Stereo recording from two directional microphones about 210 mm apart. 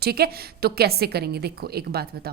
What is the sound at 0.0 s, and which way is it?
A woman's voice, 45° right (ahead or behind).